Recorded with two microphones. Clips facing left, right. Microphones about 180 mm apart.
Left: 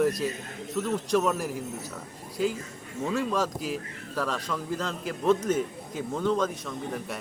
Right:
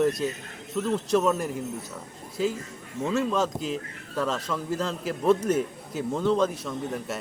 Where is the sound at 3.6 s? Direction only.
5° left (ahead or behind).